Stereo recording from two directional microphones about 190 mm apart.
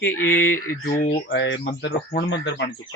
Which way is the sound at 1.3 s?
70° left (ahead or behind).